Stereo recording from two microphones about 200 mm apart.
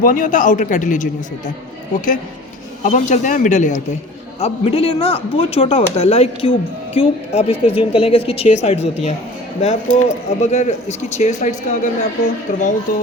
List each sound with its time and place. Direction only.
0.0 s speech: 45° left (ahead or behind)
2.8 s speech: 40° left (ahead or behind)